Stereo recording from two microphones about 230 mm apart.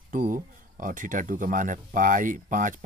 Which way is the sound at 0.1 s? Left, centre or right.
Right.